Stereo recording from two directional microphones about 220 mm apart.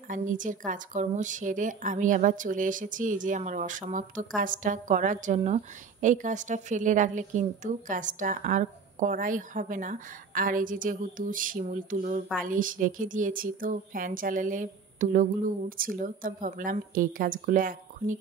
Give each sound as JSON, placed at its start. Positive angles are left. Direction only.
{"t": 0.1, "sound": "a woman's voice", "side_deg": -35}